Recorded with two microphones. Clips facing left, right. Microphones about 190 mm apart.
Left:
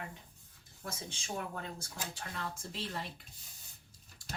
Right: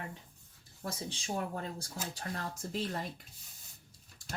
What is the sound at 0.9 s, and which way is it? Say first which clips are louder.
Speech: right 4 dB; 35° right (ahead or behind).